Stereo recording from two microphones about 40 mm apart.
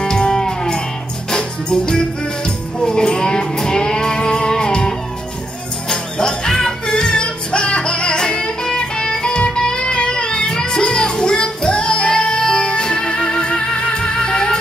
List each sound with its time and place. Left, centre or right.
0.0 s music: centre